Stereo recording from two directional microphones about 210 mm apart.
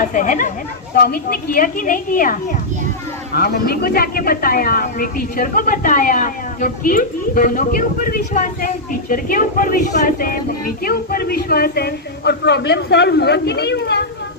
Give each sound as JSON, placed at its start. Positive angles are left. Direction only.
{"t": 0.0, "sound": "speech", "side_deg": 40}